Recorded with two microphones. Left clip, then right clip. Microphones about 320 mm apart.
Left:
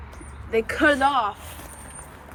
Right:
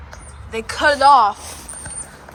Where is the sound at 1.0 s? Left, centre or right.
Centre.